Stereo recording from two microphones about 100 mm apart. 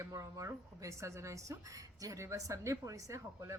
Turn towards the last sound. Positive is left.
turn(degrees=-30)  # may be behind; listen again after turning